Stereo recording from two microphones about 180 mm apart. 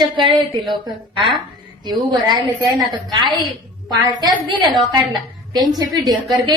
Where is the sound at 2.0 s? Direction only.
25° right (ahead or behind).